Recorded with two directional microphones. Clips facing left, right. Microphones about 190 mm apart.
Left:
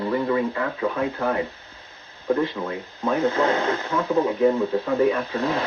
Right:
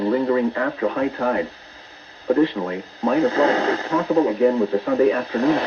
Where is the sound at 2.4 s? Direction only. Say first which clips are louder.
Right 6 dB; 35° right (ahead or behind).